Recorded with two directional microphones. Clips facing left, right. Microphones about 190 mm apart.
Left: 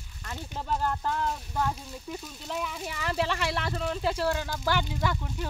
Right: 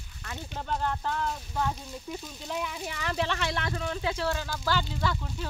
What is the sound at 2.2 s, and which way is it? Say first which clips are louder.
Speech: even; centre (ahead or behind).